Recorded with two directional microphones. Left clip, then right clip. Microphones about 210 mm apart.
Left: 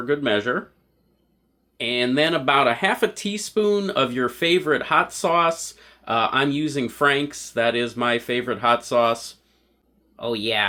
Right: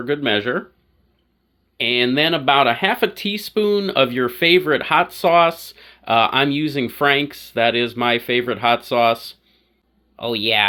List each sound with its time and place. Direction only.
0.0 s speech: 25° right (ahead or behind)
1.8 s speech: 25° right (ahead or behind)